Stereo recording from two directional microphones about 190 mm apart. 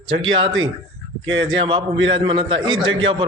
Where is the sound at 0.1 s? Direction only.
90° right.